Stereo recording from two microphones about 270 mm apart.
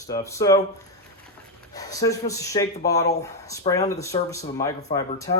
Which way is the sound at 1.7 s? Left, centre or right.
Centre.